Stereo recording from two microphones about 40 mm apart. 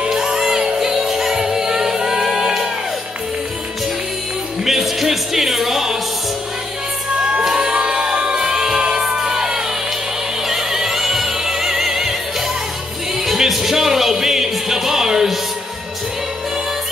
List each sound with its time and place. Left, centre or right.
0.0 s music: centre
4.6 s music: centre
7.4 s crowd: centre
7.7 s music: right